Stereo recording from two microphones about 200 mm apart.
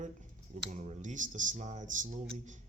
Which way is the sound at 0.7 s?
35° right (ahead or behind).